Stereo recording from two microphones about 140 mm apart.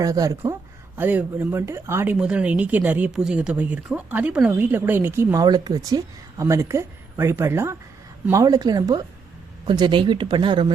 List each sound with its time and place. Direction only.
0.0 s a woman's voice: 25° right (ahead or behind)
0.9 s a woman's voice: 15° right (ahead or behind)
2.1 s a woman's voice: 5° right (ahead or behind); by 10.7 s 35° right (ahead or behind)